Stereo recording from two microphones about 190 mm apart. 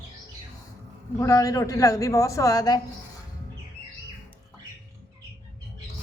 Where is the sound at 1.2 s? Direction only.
15° left (ahead or behind).